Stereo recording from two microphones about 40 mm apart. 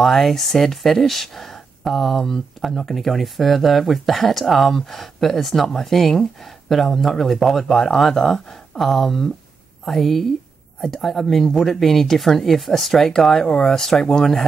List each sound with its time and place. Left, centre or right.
0.0 s speech: centre